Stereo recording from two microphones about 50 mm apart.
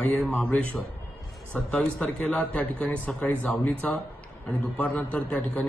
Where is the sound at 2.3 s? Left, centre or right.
Left.